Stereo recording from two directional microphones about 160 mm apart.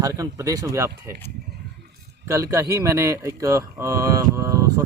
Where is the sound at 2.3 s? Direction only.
20° right (ahead or behind).